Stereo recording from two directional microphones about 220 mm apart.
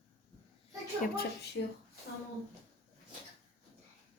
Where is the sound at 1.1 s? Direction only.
50° left (ahead or behind).